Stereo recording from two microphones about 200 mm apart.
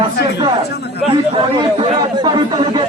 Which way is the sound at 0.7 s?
55° left (ahead or behind).